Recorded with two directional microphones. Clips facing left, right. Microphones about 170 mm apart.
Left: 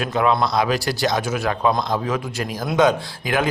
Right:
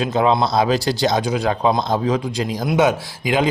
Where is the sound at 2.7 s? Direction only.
10° right (ahead or behind).